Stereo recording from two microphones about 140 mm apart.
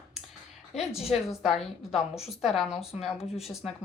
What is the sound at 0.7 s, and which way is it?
Speech, 50° left (ahead or behind).